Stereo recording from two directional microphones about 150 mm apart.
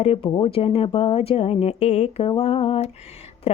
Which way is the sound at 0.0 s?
40° left (ahead or behind).